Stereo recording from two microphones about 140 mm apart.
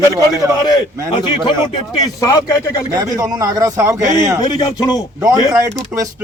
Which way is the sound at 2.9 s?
25° right (ahead or behind).